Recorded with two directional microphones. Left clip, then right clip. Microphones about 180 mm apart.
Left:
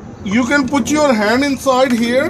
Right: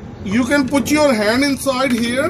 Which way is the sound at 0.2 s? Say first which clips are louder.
Left 2 dB; 40° left (ahead or behind).